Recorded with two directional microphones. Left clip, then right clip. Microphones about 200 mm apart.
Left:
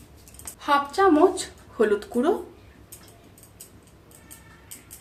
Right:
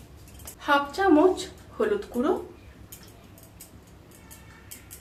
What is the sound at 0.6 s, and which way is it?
Speech, 50° left (ahead or behind).